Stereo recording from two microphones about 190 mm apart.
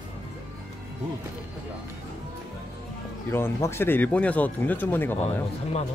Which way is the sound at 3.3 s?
10° left (ahead or behind).